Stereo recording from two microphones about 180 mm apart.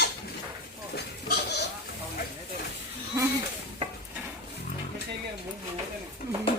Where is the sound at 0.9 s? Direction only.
65° left (ahead or behind).